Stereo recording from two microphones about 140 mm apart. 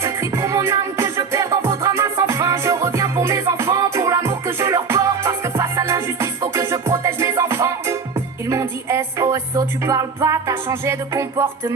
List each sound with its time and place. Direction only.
0.0 s music: 20° right (ahead or behind)